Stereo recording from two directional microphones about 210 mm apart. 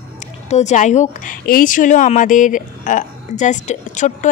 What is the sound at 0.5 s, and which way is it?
A woman's voice, 35° left (ahead or behind).